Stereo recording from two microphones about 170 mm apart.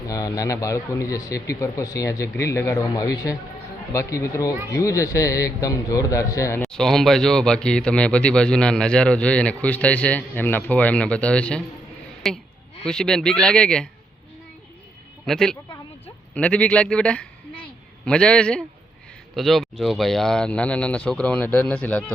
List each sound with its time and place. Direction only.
0.1 s a man's voice: 20° left (ahead or behind)
6.6 s speech: 5° left (ahead or behind)
15.3 s speech: 5° left (ahead or behind)